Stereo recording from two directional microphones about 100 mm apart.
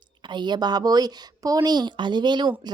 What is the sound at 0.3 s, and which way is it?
Speech, 50° right (ahead or behind).